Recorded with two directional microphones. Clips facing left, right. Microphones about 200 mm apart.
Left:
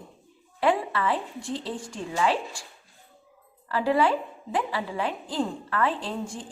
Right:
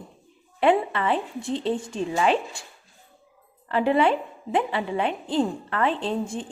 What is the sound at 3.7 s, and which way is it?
A woman's voice, 20° right (ahead or behind).